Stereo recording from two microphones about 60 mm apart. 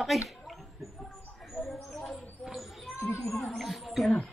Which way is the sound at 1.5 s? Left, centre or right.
Centre.